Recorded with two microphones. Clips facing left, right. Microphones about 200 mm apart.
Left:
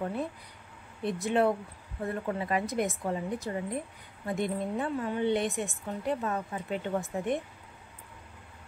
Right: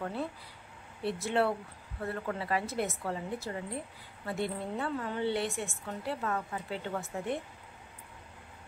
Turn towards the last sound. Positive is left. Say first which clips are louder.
# left 4 dB
turn(degrees=15)  # may be behind; listen again after turning